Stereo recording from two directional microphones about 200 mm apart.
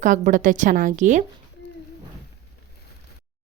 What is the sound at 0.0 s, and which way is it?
Speech, 40° right (ahead or behind).